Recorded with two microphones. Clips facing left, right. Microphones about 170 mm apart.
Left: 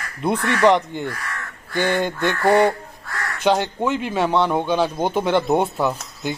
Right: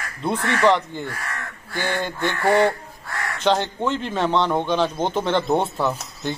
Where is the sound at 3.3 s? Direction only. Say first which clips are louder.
Left 2 dB; 10° left (ahead or behind).